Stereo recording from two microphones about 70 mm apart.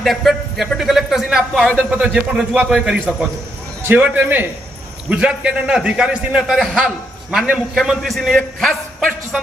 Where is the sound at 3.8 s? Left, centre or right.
Right.